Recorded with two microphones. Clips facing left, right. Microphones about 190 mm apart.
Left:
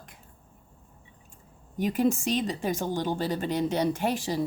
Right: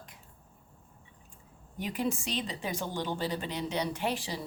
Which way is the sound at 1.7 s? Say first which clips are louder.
Left 8 dB; 45° left (ahead or behind).